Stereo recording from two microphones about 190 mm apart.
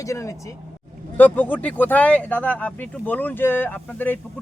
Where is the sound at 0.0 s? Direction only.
15° left (ahead or behind).